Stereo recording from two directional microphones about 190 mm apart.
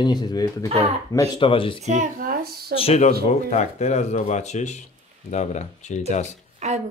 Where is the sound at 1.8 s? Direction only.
40° right (ahead or behind).